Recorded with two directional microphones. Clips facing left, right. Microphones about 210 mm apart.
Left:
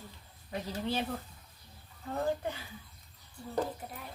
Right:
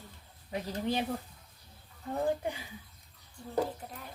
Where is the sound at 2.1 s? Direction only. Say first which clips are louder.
Right 2 dB; 15° right (ahead or behind).